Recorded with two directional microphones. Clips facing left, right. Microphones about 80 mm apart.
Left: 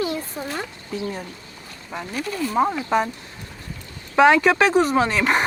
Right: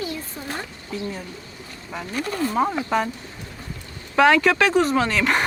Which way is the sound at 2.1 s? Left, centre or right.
Right.